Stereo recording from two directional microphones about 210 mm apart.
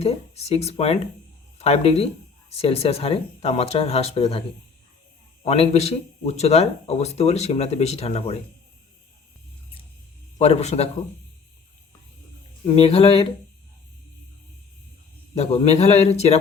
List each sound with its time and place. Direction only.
0.0 s speech: 30° left (ahead or behind)
10.3 s a man's voice: 30° left (ahead or behind)
12.6 s speech: 30° left (ahead or behind)
15.4 s a man's voice: 30° left (ahead or behind)